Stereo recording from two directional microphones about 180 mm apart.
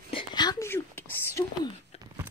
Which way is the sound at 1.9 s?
35° left (ahead or behind).